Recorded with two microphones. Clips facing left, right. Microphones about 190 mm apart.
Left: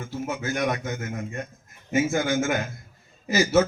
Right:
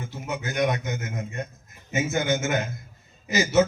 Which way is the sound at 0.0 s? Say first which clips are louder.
Left 2 dB; 20° right (ahead or behind).